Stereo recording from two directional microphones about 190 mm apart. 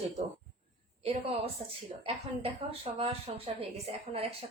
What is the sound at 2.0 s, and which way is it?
A woman's voice, 30° right (ahead or behind).